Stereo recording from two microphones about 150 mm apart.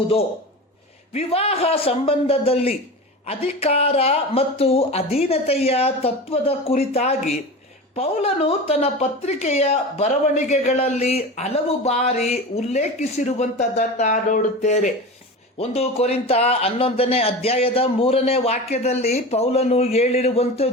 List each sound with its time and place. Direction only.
1.1 s a man's voice: 40° left (ahead or behind)
15.5 s a man's voice: 40° left (ahead or behind)